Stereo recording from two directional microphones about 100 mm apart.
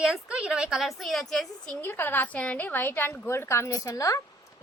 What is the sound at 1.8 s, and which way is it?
A woman's voice, 20° left (ahead or behind).